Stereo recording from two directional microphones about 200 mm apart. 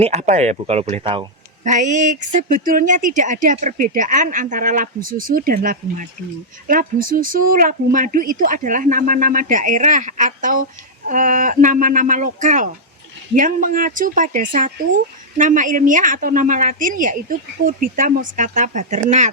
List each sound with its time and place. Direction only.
0.0 s speech: 35° right (ahead or behind)
1.6 s speech: 40° right (ahead or behind)